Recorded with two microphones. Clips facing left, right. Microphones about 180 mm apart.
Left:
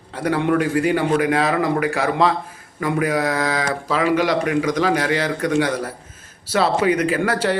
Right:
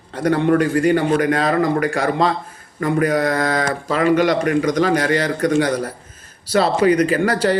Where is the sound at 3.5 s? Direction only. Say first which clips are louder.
Right 2 dB; 50° right (ahead or behind).